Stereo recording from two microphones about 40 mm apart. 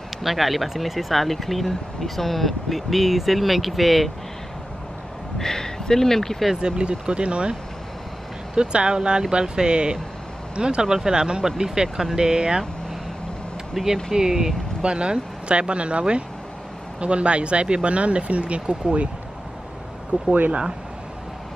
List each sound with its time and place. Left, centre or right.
0.2 s speech: centre
5.4 s speech: centre
6.6 s speech: right
8.5 s speech: right
13.8 s speech: centre
14.1 s speech: centre
14.8 s speech: right
20.1 s speech: right